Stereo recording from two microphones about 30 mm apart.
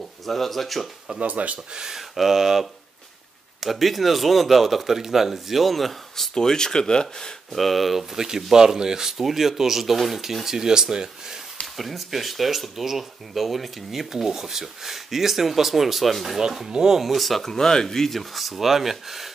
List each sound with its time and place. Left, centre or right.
0.3 s speech: centre
1.2 s speech: right
1.8 s speech: centre
6.3 s speech: centre
7.5 s speech: centre
8.2 s speech: centre
9.2 s speech: centre
10.4 s speech: centre
11.7 s speech: centre
14.1 s speech: centre
16.3 s speech: centre
17.0 s speech: centre
17.5 s speech: centre
18.3 s speech: centre